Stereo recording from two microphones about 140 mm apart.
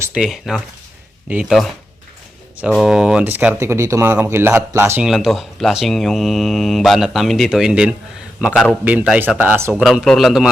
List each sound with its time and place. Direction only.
0.1 s speech: 5° right (ahead or behind)
2.8 s speech: 5° right (ahead or behind)
5.0 s a man's voice: centre (ahead or behind)
9.8 s speech: centre (ahead or behind)